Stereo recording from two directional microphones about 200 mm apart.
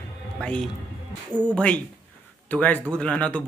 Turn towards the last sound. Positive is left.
turn(degrees=5)  # may be behind; listen again after turning